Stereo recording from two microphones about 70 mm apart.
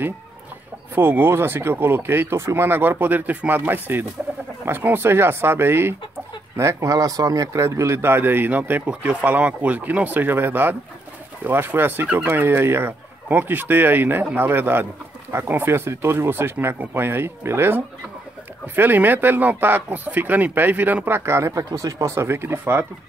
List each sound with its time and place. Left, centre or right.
0.9 s speech: right
6.9 s speech: right
7.6 s speech: right
21.6 s speech: right